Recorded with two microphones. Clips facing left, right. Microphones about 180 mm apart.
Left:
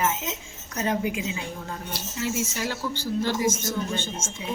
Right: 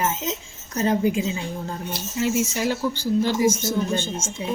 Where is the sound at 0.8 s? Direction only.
35° right (ahead or behind).